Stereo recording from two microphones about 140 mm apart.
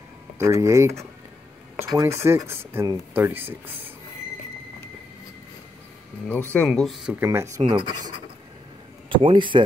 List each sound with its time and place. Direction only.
0.4 s speech: 20° right (ahead or behind)
6.2 s speech: 10° left (ahead or behind)
6.7 s speech: centre (ahead or behind)
7.2 s speech: 20° right (ahead or behind)
7.6 s speech: 35° right (ahead or behind)
9.1 s speech: 35° right (ahead or behind)